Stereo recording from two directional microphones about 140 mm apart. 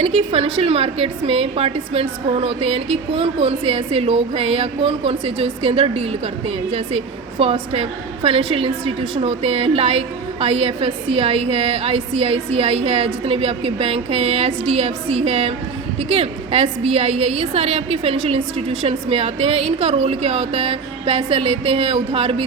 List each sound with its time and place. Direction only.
0.0 s a woman's voice: 45° right (ahead or behind)